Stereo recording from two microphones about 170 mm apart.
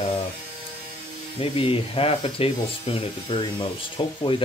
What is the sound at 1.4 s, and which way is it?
Speech, 35° left (ahead or behind).